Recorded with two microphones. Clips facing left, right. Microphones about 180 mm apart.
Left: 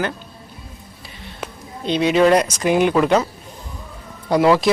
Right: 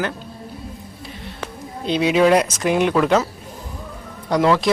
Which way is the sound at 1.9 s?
5° right (ahead or behind).